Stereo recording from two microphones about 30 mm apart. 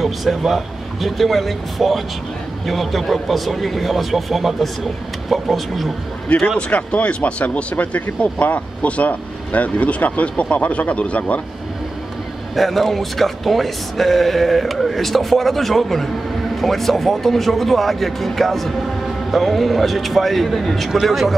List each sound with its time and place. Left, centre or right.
0.0 s speech: centre
6.2 s speech: left
7.9 s speech: left
12.5 s speech: centre